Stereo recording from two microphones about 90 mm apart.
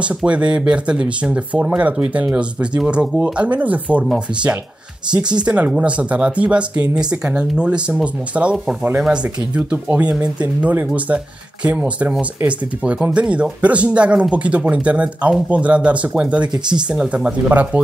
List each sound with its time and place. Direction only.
0.0 s speech: 15° right (ahead or behind)
5.4 s speech: 10° right (ahead or behind)
11.6 s speech: 15° right (ahead or behind)
16.5 s speech: 55° right (ahead or behind)
16.9 s speech: 10° right (ahead or behind)